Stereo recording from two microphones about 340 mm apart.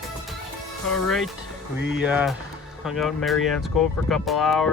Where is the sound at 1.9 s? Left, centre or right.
Centre.